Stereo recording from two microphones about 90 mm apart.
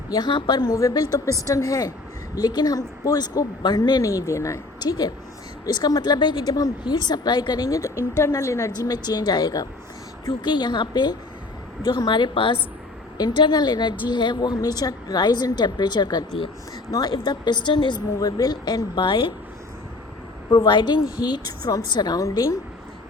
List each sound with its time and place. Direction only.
0.1 s a woman's voice: 50° left (ahead or behind)
2.3 s a woman's voice: 50° left (ahead or behind)
4.0 s a woman's voice: 35° left (ahead or behind)
4.8 s a woman's voice: 50° left (ahead or behind); by 8.7 s 35° left (ahead or behind)
8.8 s a woman's voice: 45° left (ahead or behind); by 12.5 s 75° left (ahead or behind)
13.1 s a woman's voice: 55° left (ahead or behind)
18.2 s a woman's voice: 45° left (ahead or behind)
19.0 s speech: 70° left (ahead or behind)
20.5 s a woman's voice: 55° left (ahead or behind); by 22.5 s 35° left (ahead or behind)